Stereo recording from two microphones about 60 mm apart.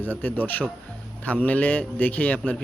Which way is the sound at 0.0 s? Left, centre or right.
Left.